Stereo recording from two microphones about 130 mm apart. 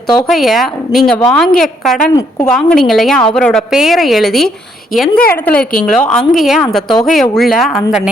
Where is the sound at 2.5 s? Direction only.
5° left (ahead or behind).